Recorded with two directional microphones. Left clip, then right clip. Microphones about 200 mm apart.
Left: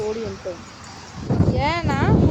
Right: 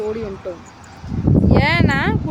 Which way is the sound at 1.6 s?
10° right (ahead or behind).